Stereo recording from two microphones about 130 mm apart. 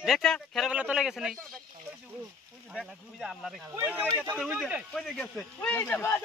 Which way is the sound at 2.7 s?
Centre (ahead or behind).